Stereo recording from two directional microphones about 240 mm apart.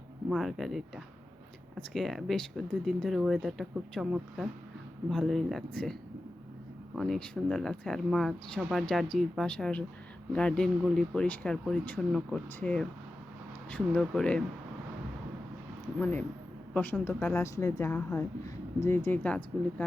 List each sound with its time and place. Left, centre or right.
0.3 s speech: centre
16.0 s a woman's voice: centre